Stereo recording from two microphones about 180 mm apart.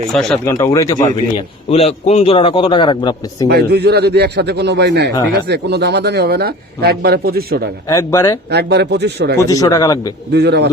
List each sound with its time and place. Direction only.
0.1 s speech: centre (ahead or behind)
0.4 s speech: 20° left (ahead or behind)
1.7 s a man's voice: 35° left (ahead or behind)
3.5 s speech: 60° right (ahead or behind)
7.9 s a man's voice: 15° left (ahead or behind)
8.4 s speech: 65° right (ahead or behind)
9.4 s speech: 20° left (ahead or behind)
10.3 s a man's voice: 70° right (ahead or behind)